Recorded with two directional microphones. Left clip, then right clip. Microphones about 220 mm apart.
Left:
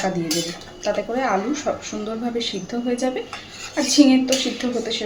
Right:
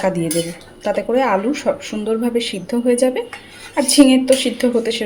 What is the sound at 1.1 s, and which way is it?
Speech, 45° right (ahead or behind).